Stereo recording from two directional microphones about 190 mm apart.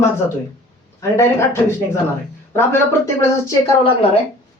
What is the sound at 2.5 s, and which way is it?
Speech, 10° left (ahead or behind).